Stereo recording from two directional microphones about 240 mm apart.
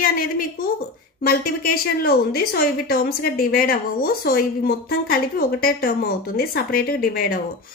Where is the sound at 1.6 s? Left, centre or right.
Left.